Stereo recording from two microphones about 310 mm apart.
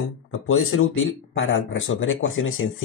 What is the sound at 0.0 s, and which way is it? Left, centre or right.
Speech, left.